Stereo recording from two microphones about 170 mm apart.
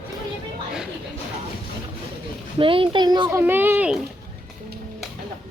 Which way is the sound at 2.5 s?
30° right (ahead or behind).